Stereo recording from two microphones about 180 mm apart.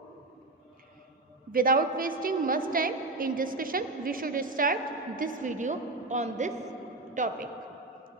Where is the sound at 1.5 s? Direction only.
50° right (ahead or behind).